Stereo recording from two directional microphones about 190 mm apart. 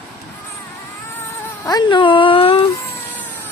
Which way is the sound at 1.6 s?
25° left (ahead or behind).